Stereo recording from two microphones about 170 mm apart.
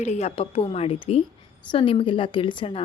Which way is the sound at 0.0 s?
40° left (ahead or behind).